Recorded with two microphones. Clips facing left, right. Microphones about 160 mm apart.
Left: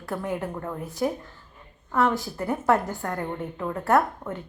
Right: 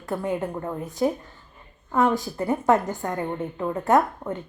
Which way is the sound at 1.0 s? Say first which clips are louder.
Right 3 dB; centre (ahead or behind).